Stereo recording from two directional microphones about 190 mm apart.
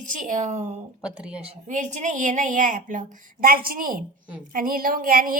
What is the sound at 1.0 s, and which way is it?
Speech, 5° right (ahead or behind).